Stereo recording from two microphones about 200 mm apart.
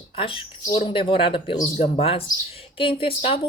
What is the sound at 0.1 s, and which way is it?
Speech, 25° left (ahead or behind).